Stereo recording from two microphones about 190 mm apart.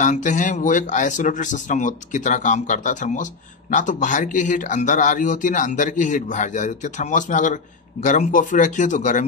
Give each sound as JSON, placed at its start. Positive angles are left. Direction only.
{"t": 0.0, "sound": "speech", "side_deg": 40}